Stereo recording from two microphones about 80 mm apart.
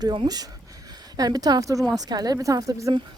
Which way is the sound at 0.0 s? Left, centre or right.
Right.